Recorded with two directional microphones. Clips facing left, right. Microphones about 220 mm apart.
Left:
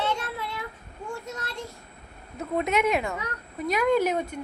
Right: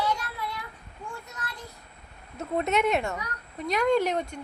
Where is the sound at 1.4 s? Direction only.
25° left (ahead or behind).